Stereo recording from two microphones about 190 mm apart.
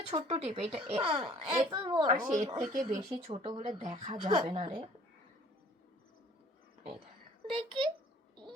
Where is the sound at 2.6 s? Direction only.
35° right (ahead or behind).